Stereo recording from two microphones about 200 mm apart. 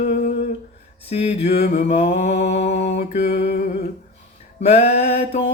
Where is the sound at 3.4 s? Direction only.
35° left (ahead or behind).